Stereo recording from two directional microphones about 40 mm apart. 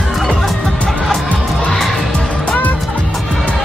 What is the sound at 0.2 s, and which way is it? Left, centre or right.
Music, centre.